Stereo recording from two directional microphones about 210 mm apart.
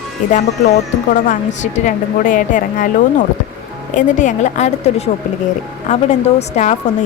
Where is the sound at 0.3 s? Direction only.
35° left (ahead or behind).